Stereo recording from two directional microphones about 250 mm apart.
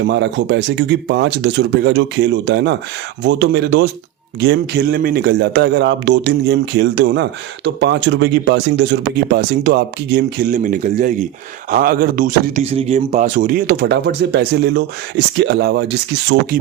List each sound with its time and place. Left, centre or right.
0.0 s a man's voice: right